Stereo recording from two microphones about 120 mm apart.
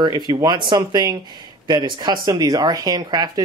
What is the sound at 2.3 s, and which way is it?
Speech, 30° right (ahead or behind).